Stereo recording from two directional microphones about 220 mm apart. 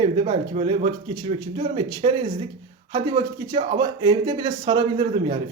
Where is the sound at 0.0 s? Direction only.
25° right (ahead or behind).